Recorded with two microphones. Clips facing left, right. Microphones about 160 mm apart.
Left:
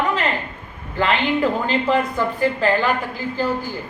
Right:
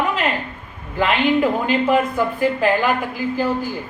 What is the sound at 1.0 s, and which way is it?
A woman's voice, 15° right (ahead or behind).